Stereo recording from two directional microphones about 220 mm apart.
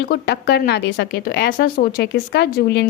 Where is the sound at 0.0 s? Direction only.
50° left (ahead or behind).